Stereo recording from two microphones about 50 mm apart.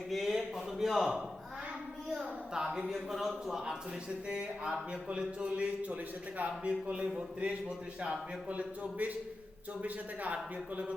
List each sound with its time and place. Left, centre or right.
0.1 s a man's voice: centre
2.5 s speech: centre
2.9 s speech: centre; by 7.1 s right
8.4 s speech: right
10.3 s speech: right